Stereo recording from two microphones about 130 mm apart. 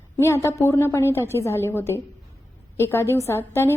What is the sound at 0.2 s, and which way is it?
A woman's voice, 20° left (ahead or behind).